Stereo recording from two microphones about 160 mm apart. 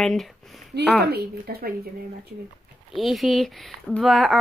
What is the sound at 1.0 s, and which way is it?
Speech, 80° right.